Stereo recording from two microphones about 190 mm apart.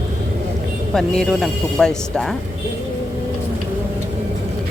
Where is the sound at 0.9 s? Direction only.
Centre (ahead or behind).